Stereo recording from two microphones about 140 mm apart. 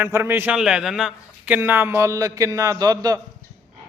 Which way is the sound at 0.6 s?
5° right (ahead or behind).